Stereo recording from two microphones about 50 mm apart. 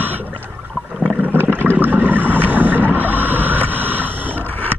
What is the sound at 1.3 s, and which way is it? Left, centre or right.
Boat, right.